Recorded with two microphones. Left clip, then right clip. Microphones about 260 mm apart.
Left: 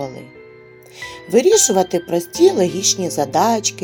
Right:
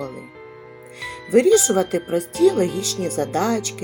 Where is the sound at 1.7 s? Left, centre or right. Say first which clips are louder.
Left 3 dB; centre.